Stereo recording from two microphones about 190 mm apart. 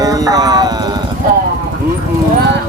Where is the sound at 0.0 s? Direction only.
20° right (ahead or behind).